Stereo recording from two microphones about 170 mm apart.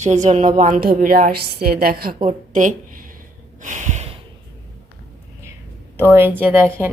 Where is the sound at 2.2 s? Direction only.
50° right (ahead or behind).